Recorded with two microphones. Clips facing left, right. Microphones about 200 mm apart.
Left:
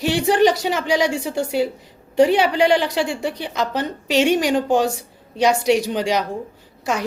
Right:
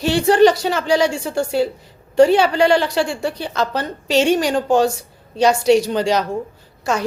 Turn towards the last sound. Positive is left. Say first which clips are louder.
# right 2 dB
turn(degrees=15)  # may be behind; listen again after turning